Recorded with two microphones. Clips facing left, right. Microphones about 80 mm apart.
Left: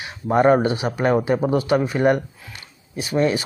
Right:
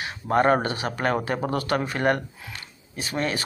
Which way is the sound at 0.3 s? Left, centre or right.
Centre.